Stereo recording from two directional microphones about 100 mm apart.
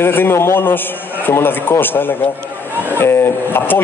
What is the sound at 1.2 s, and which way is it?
Speech, 20° left (ahead or behind).